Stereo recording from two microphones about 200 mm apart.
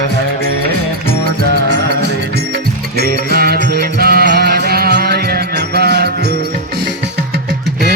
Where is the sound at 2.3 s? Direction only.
55° right (ahead or behind).